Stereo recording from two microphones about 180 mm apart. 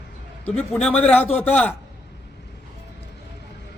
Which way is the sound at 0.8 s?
10° left (ahead or behind).